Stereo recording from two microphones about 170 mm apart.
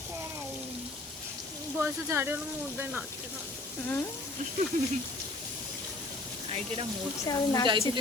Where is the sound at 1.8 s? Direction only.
15° right (ahead or behind).